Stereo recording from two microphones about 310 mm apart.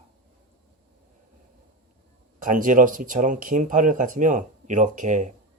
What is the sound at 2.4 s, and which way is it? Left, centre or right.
Speech, right.